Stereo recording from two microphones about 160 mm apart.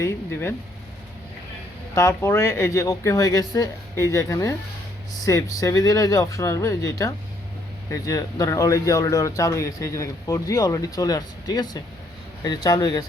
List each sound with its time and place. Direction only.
0.0 s speech: 15° left (ahead or behind)
2.0 s a man's voice: 15° left (ahead or behind)